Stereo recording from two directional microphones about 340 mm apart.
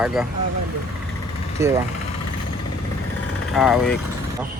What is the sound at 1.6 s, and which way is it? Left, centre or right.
Speech, centre.